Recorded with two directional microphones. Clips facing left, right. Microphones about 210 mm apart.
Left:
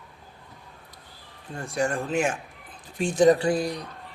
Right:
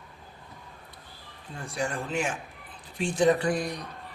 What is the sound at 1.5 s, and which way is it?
Speech, 45° left (ahead or behind).